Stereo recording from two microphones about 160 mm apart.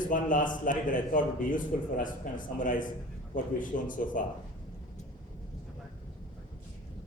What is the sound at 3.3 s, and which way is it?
Speech, 55° left (ahead or behind).